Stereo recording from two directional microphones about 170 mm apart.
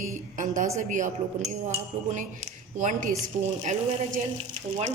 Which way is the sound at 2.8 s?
45° right (ahead or behind).